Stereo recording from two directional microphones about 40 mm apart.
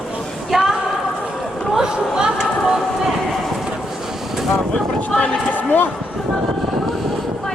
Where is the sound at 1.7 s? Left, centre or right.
Centre.